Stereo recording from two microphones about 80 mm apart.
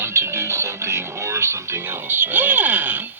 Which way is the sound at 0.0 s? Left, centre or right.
Right.